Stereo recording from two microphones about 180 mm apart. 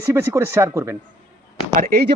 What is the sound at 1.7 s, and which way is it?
Speech, 55° right (ahead or behind).